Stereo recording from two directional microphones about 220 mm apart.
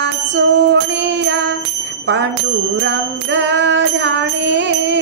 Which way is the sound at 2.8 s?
55° right (ahead or behind).